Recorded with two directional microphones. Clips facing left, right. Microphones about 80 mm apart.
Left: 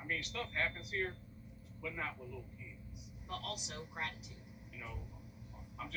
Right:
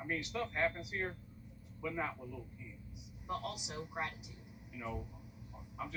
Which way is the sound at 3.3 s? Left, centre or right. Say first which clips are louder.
Right 3 dB; centre.